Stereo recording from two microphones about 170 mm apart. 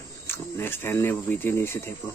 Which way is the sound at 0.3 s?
15° left (ahead or behind).